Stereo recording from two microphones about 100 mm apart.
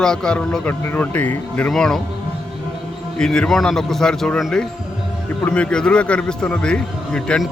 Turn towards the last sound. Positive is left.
turn(degrees=10)  # may be behind; listen again after turning